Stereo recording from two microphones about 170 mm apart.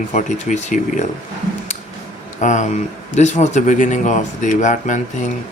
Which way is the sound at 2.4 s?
45° left (ahead or behind).